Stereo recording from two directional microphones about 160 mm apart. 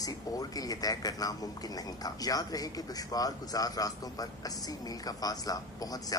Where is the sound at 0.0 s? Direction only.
20° left (ahead or behind).